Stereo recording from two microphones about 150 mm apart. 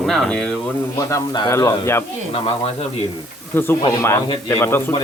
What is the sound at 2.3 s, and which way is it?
Speech, 40° left (ahead or behind).